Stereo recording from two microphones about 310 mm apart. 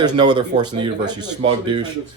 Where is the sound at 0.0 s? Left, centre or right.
Centre.